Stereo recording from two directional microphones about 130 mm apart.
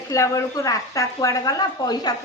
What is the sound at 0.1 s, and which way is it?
Speech, 25° left (ahead or behind).